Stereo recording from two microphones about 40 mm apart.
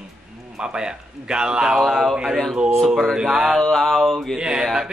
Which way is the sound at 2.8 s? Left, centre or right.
Centre.